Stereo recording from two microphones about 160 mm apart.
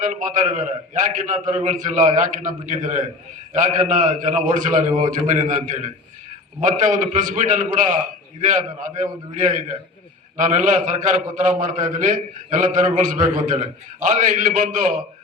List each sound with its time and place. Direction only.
0.0 s a man's voice: 55° right (ahead or behind)